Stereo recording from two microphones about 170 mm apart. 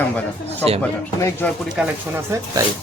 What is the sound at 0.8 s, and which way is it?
Speech, 10° left (ahead or behind).